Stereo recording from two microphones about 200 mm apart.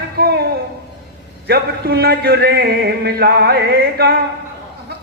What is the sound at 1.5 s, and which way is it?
A man's voice, 50° right (ahead or behind).